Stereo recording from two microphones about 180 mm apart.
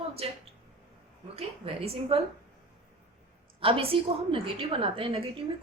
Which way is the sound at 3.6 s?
30° right (ahead or behind).